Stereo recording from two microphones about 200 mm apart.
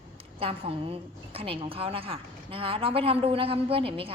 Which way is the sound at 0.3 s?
30° right (ahead or behind).